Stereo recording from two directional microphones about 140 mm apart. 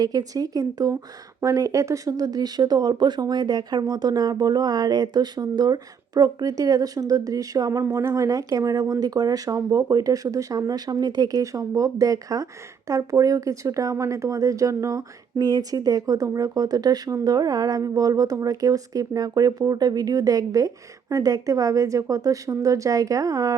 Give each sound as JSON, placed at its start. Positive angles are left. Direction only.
{"t": 0.0, "sound": "speech", "side_deg": -25}